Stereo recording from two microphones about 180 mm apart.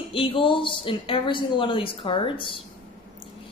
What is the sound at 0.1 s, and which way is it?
Speech, 30° left (ahead or behind).